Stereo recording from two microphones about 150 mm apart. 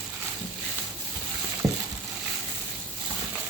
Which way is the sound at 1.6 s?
20° right (ahead or behind).